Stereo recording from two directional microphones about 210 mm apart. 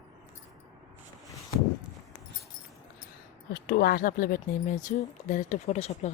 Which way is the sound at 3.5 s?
45° left (ahead or behind).